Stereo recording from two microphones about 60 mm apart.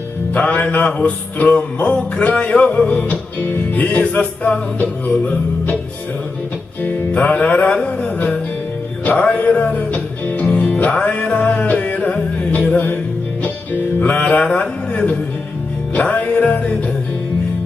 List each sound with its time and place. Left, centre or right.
0.3 s music: left
6.8 s music: left
14.0 s music: left
14.5 s speech: left
16.0 s music: left